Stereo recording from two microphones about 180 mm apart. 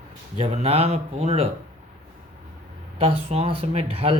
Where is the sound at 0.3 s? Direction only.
35° right (ahead or behind).